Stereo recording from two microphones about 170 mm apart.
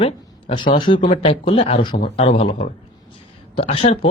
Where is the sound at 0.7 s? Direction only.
30° left (ahead or behind).